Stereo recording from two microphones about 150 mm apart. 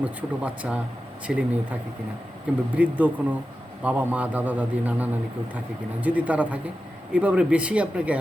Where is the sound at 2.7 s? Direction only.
10° right (ahead or behind).